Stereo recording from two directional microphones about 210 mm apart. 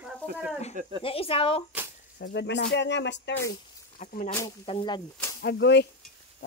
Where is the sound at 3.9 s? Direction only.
40° left (ahead or behind).